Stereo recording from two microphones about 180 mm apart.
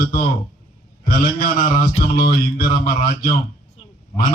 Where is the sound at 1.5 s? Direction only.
45° left (ahead or behind).